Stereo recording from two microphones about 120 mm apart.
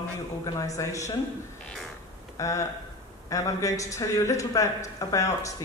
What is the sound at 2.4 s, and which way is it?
A man's voice, 25° left (ahead or behind).